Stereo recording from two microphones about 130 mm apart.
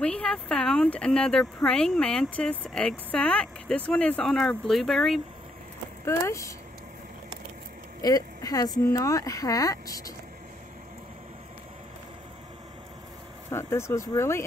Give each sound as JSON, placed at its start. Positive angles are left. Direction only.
{"t": 0.0, "sound": "speech", "side_deg": 5}
{"t": 6.0, "sound": "speech", "side_deg": 20}
{"t": 8.0, "sound": "speech", "side_deg": 30}
{"t": 13.5, "sound": "speech", "side_deg": 20}